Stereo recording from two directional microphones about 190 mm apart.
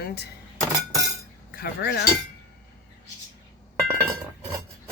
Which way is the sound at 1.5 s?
55° left (ahead or behind).